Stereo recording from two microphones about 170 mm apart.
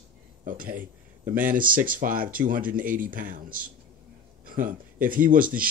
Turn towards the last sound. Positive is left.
turn(degrees=-55)  # may be behind; listen again after turning